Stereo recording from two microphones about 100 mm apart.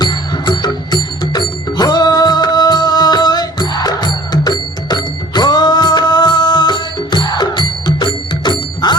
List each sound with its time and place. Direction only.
0.0 s music: 45° left (ahead or behind)